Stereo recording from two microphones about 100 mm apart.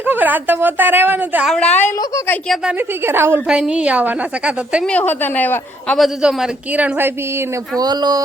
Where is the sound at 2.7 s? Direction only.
20° right (ahead or behind).